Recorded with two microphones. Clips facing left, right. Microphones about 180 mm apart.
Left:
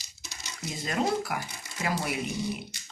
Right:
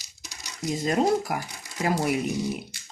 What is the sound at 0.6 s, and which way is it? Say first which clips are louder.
Speech: right 6 dB; 40° right (ahead or behind).